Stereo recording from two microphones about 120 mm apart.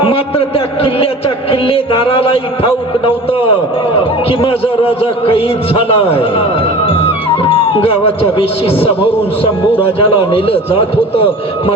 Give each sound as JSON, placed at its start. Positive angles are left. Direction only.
{"t": 0.0, "sound": "a man's voice", "side_deg": 50}
{"t": 7.5, "sound": "a man's voice", "side_deg": 50}